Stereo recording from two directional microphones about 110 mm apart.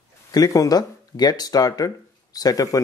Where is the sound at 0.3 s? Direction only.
35° left (ahead or behind).